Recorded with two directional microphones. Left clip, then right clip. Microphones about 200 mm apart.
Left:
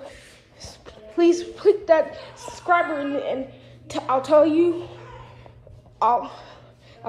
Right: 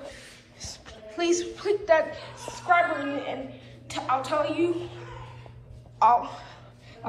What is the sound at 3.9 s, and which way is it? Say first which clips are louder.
A man's voice: left 8 dB; 30° left (ahead or behind).